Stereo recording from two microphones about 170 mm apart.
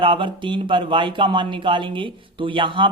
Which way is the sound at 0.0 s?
30° right (ahead or behind).